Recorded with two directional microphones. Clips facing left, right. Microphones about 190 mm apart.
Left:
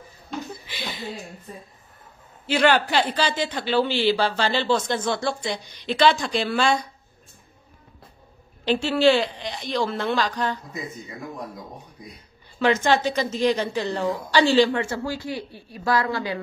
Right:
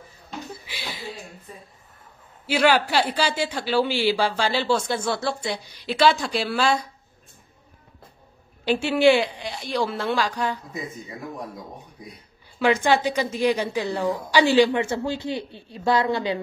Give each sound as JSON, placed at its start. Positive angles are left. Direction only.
{"t": 0.5, "sound": "a sound", "side_deg": -5}
{"t": 2.4, "sound": "a man's voice", "side_deg": -10}
{"t": 8.6, "sound": "a man's voice", "side_deg": -15}
{"t": 12.5, "sound": "a man's voice", "side_deg": -10}